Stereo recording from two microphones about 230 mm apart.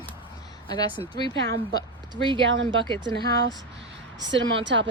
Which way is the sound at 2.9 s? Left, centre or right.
Centre.